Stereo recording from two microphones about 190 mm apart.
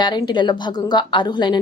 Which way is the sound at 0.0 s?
20° left (ahead or behind).